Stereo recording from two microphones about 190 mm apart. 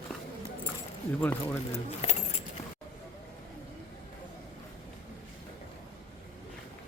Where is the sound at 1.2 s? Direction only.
10° left (ahead or behind).